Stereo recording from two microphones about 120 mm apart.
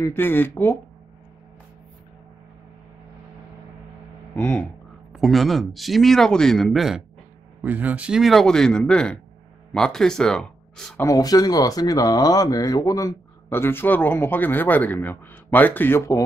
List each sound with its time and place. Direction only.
0.0 s speech: 20° left (ahead or behind)
4.4 s speech: 10° left (ahead or behind)
5.1 s speech: centre (ahead or behind)
7.6 s speech: 15° right (ahead or behind); by 11.0 s 5° left (ahead or behind)
11.0 s speech: 30° left (ahead or behind)